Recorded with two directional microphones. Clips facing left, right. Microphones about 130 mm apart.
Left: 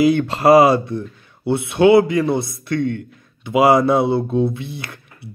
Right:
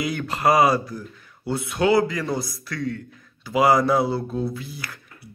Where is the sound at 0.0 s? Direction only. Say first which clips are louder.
Left 8 dB; 25° left (ahead or behind).